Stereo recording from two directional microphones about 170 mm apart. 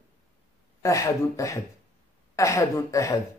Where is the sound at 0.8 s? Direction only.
20° left (ahead or behind).